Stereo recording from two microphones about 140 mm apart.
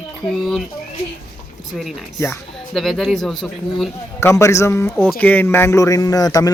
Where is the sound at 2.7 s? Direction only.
Centre (ahead or behind).